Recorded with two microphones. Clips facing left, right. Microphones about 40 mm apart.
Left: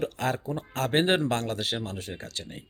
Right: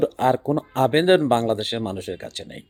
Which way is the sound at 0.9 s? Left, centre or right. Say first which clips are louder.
Right 6 dB; centre.